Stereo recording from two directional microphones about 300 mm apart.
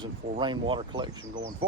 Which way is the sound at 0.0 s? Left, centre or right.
Centre.